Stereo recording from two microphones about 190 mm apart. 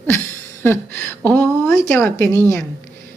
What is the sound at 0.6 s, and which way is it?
A woman's voice, 10° left (ahead or behind).